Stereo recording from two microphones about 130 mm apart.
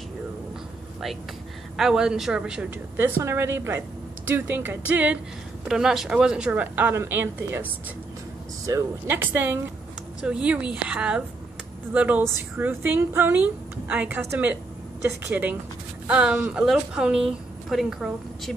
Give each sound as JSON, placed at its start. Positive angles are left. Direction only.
{"t": 1.8, "sound": "a woman's voice", "side_deg": -5}
{"t": 3.0, "sound": "speech", "side_deg": -20}
{"t": 8.6, "sound": "a woman's voice", "side_deg": -20}